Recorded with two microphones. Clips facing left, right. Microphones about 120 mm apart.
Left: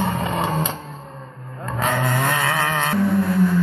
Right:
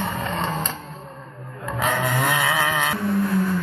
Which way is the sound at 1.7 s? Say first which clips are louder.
Left 1 dB; centre (ahead or behind).